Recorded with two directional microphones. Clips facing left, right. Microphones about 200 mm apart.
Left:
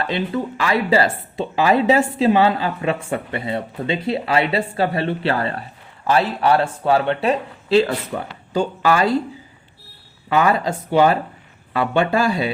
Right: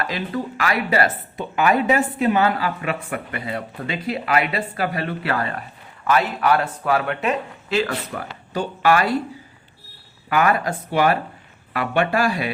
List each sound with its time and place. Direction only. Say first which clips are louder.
0.0 s a woman's voice: left 3 dB; 30° left (ahead or behind)
10.2 s a woman's voice: left 2 dB; 25° left (ahead or behind)